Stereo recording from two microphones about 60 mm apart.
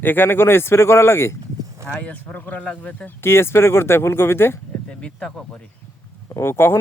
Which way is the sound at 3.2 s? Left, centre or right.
Left.